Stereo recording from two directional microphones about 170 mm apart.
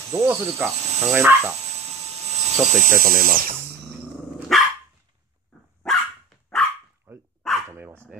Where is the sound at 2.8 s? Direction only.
55° right (ahead or behind).